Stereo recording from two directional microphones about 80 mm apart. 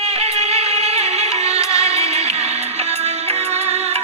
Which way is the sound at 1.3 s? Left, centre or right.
Left.